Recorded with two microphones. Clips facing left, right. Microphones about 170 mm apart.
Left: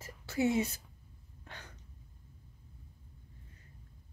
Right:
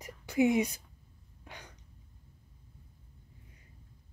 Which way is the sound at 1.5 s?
15° right (ahead or behind).